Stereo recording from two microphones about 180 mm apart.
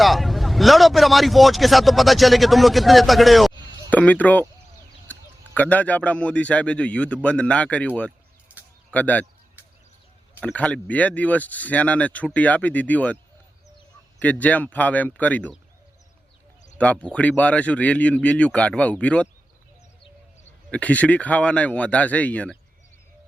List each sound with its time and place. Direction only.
0.0 s speech: centre (ahead or behind)
5.5 s speech: 10° left (ahead or behind)
8.9 s speech: 10° left (ahead or behind)
10.4 s speech: 5° left (ahead or behind)
14.2 s speech: 10° left (ahead or behind)
16.7 s speech: 5° left (ahead or behind)
20.7 s speech: 10° left (ahead or behind)